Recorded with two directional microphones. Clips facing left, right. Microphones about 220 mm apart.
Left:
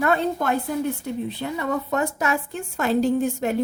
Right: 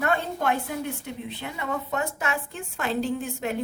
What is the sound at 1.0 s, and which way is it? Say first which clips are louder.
Speech: left 7 dB; 40° left (ahead or behind).